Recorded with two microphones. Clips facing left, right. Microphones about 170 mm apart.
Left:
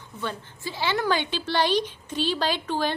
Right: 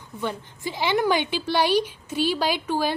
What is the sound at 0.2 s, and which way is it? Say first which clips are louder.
A woman's voice: right 3 dB; 15° right (ahead or behind).